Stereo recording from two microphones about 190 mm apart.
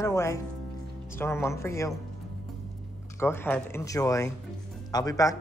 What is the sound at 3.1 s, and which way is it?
Speech, 10° left (ahead or behind).